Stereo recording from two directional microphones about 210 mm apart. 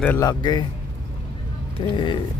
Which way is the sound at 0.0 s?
10° left (ahead or behind).